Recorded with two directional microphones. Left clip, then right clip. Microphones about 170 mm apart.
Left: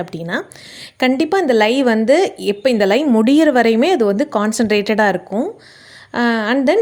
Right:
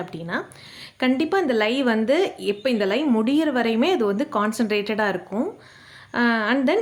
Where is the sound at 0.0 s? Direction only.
40° left (ahead or behind).